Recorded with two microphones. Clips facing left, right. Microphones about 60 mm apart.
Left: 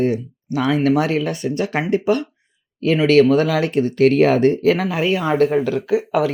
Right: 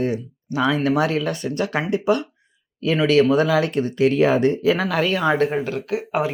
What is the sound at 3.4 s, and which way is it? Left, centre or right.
Speech, left.